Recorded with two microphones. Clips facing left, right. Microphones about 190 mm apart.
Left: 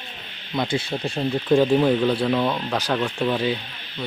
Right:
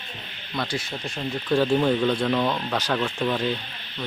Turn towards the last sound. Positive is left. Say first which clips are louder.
# left 2 dB
turn(degrees=5)  # may be behind; listen again after turning